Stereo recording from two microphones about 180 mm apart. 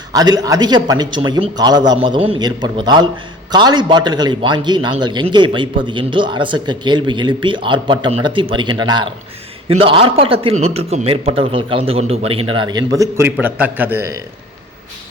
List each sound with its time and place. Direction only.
0.1 s a man's voice: 20° right (ahead or behind)